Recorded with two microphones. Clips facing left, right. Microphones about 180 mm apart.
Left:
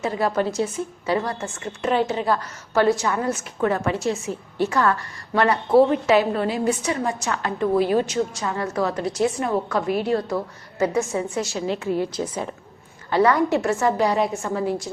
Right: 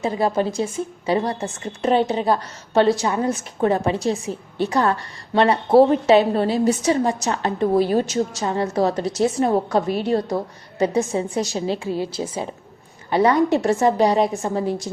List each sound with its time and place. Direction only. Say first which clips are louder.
0.0 s a woman's voice: right 2 dB; 25° right (ahead or behind)
12.2 s a woman's voice: right 1 dB; 20° right (ahead or behind)
13.6 s a woman's voice: right 3 dB; 35° right (ahead or behind)
13.8 s a woman's voice: right 3 dB; 20° right (ahead or behind)